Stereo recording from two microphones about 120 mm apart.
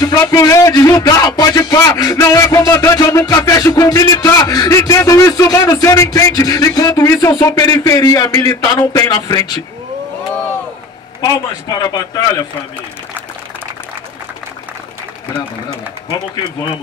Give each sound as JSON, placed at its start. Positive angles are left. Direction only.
{"t": 0.0, "sound": "a man's voice", "side_deg": 30}
{"t": 11.1, "sound": "a man's voice", "side_deg": 35}